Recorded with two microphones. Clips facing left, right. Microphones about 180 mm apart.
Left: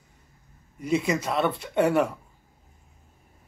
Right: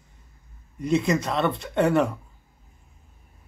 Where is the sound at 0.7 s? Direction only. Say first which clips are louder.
Right 2 dB; 10° left (ahead or behind).